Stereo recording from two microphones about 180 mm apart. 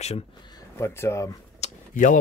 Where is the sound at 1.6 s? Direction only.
45° left (ahead or behind).